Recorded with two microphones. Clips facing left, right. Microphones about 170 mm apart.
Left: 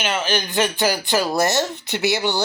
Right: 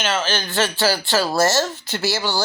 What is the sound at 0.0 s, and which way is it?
Speech, 15° left (ahead or behind).